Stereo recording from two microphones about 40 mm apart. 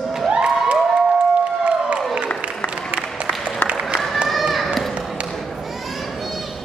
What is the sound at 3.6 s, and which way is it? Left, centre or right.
Run, right.